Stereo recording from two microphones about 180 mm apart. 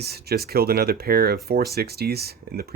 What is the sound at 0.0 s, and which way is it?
Speech, 60° right (ahead or behind).